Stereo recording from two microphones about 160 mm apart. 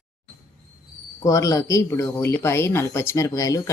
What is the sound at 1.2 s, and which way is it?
Speech, 20° left (ahead or behind).